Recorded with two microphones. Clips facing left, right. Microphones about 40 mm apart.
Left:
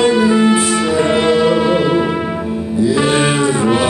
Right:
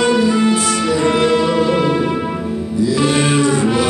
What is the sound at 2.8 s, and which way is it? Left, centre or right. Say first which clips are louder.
Cattle: left 2 dB; left.